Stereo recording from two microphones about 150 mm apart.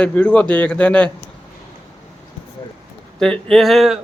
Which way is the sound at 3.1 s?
5° left (ahead or behind).